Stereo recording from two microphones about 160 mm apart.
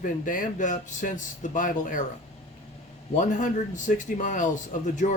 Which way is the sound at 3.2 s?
50° left (ahead or behind).